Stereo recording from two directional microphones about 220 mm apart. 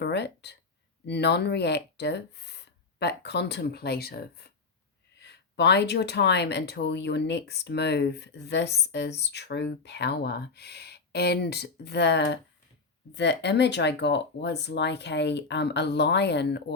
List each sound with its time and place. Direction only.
0.0 s speech: 50° left (ahead or behind)